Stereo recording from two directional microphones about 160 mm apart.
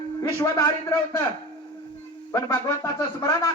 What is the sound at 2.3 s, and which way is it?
Speech, 20° left (ahead or behind).